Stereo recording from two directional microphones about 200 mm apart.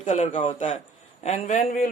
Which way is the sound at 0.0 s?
35° left (ahead or behind).